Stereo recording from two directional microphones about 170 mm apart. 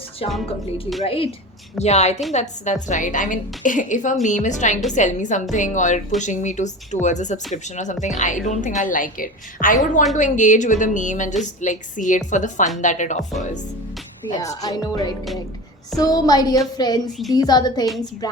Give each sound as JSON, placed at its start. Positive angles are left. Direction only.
{"t": 0.2, "sound": "a woman's voice", "side_deg": 35}
{"t": 14.3, "sound": "a woman's voice", "side_deg": 20}
{"t": 17.1, "sound": "a woman's voice", "side_deg": 0}
{"t": 17.3, "sound": "a woman's voice", "side_deg": 25}